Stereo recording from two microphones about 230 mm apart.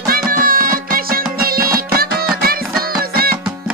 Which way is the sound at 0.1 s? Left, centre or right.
Right.